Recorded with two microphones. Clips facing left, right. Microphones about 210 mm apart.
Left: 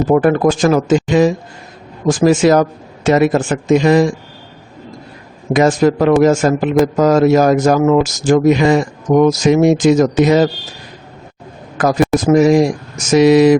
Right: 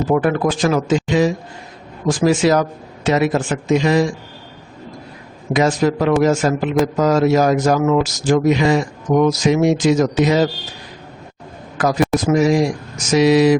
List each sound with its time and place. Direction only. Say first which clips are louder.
0.1 s speech: left 5 dB; 50° left (ahead or behind)
5.5 s speech: left 4 dB; 50° left (ahead or behind)
11.8 s speech: left 3 dB; 45° left (ahead or behind)